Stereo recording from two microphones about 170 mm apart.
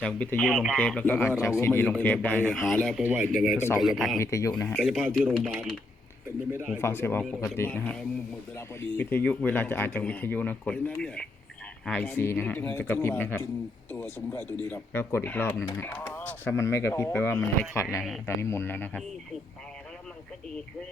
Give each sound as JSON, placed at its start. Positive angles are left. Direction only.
{"t": 0.0, "sound": "speech", "side_deg": 5}
{"t": 0.8, "sound": "speech", "side_deg": 5}
{"t": 4.2, "sound": "speech", "side_deg": 20}
{"t": 4.8, "sound": "a man's voice", "side_deg": 5}
{"t": 6.7, "sound": "speech", "side_deg": 15}